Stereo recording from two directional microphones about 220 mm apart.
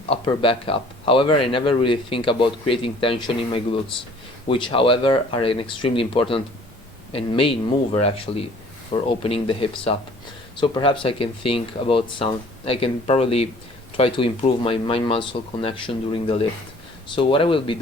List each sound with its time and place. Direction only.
0.1 s a man's voice: 25° left (ahead or behind)